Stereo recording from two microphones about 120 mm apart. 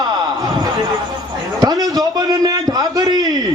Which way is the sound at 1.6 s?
35° right (ahead or behind).